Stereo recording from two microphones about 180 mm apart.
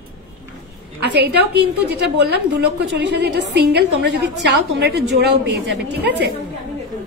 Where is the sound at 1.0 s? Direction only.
65° right (ahead or behind).